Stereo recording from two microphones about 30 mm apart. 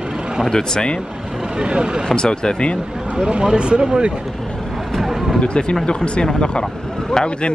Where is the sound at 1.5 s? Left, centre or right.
Right.